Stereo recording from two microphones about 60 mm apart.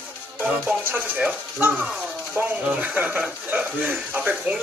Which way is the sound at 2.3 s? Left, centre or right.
Right.